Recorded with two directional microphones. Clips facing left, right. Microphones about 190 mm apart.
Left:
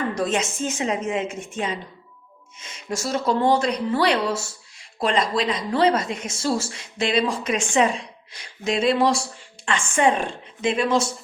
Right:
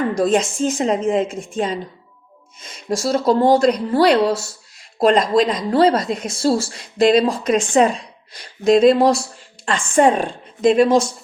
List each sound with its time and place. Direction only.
0.2 s speech: 35° right (ahead or behind)